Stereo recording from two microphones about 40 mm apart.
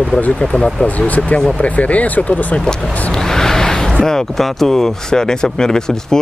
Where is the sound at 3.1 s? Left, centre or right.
Centre.